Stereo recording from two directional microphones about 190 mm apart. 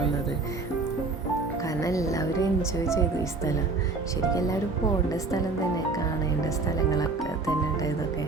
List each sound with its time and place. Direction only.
1.6 s a woman's voice: 15° left (ahead or behind)
5.1 s speech: 20° left (ahead or behind)